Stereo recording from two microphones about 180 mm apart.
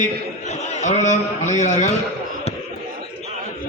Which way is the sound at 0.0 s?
40° left (ahead or behind).